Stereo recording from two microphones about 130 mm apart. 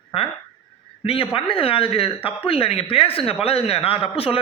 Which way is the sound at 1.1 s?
45° left (ahead or behind).